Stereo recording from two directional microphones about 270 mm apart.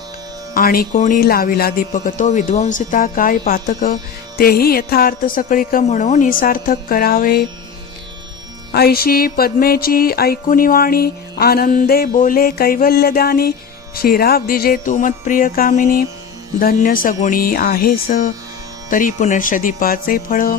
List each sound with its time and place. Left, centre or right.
0.5 s music: left
8.7 s music: left